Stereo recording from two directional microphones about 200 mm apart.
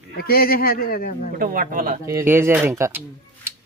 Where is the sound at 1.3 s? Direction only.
45° right (ahead or behind).